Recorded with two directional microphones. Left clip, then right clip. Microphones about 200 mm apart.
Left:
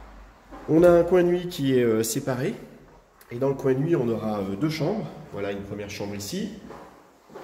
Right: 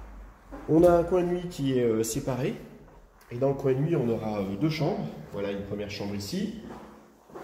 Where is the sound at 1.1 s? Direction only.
35° left (ahead or behind).